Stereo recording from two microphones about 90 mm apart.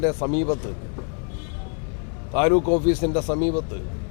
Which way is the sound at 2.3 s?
20° left (ahead or behind).